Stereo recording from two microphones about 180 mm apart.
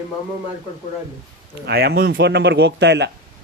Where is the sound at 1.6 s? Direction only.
65° right (ahead or behind).